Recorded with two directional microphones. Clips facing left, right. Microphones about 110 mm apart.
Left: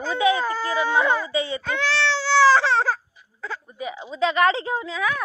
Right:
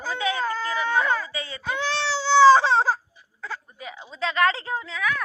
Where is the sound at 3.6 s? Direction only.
5° left (ahead or behind).